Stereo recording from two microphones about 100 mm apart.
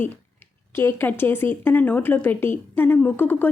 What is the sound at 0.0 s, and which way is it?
A woman's voice, 20° left (ahead or behind).